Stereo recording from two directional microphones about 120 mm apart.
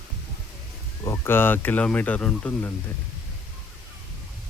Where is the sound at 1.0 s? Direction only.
20° left (ahead or behind).